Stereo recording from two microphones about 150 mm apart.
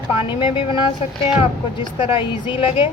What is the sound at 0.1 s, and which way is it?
Speech, 35° left (ahead or behind).